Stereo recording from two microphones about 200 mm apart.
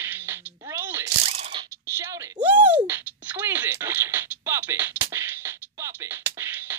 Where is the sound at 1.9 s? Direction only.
15° right (ahead or behind).